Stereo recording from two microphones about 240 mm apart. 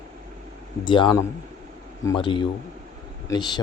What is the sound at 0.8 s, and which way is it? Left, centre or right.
Speech, centre.